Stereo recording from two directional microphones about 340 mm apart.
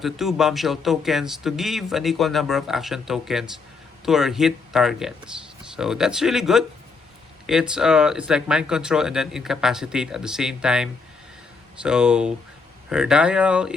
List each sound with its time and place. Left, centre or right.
0.0 s speech: centre